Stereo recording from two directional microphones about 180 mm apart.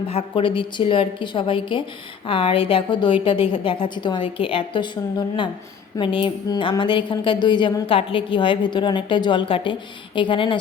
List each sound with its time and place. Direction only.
0.1 s speech: 30° left (ahead or behind)